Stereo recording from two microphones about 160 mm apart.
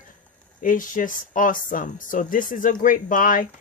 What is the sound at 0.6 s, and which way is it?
Speech, 55° left (ahead or behind).